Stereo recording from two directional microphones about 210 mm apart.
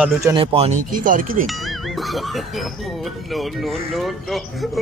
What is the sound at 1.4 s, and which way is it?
Speech, centre (ahead or behind).